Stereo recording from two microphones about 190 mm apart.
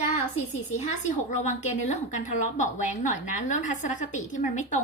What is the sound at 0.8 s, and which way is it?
A woman's voice, 40° left (ahead or behind).